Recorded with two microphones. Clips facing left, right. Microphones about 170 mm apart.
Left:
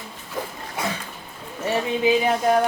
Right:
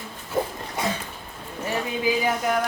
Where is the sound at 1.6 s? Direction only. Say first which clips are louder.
Left 4 dB; 25° left (ahead or behind).